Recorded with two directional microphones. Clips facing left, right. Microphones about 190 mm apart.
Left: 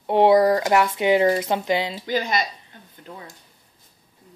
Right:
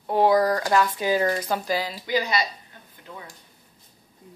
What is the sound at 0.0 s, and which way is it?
Speech, 25° left (ahead or behind).